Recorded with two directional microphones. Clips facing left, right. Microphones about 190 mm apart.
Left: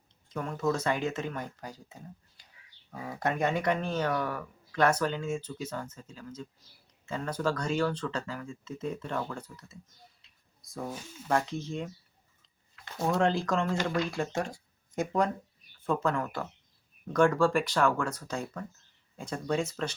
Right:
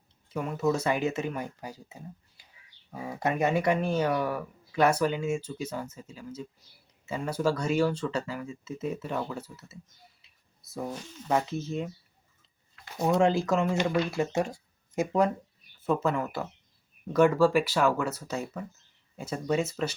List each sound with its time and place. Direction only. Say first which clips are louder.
0.3 s speech: right 3 dB; 10° right (ahead or behind)
10.2 s a sound: even; 5° right (ahead or behind)
10.9 s speech: right 2 dB; 10° left (ahead or behind)
11.3 s speech: right 2 dB; 5° right (ahead or behind)
13.0 s speech: right 3 dB; 10° right (ahead or behind)